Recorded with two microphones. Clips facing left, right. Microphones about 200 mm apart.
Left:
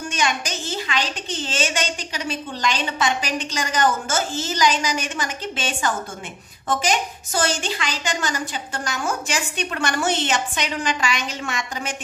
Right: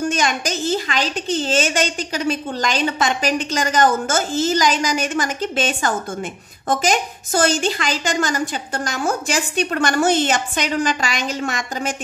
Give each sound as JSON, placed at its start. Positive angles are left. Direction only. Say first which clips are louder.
{"t": 0.8, "sound": "a woman's voice", "louder": "right 4 dB", "side_deg": -40}
{"t": 6.9, "sound": "a woman's voice", "louder": "right 4 dB", "side_deg": -45}